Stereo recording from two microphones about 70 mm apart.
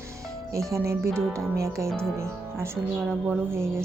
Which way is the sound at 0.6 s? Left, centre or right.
Right.